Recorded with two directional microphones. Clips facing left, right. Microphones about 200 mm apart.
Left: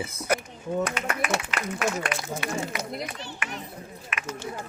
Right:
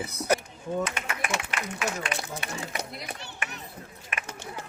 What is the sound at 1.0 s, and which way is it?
Speech, 60° left (ahead or behind).